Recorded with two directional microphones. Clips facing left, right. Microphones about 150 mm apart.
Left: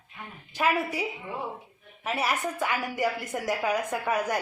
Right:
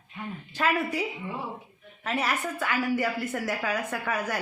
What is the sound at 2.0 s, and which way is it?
A woman's voice, 10° left (ahead or behind).